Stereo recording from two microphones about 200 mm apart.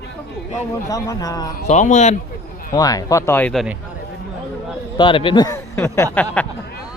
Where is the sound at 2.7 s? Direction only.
15° left (ahead or behind); by 3.8 s centre (ahead or behind).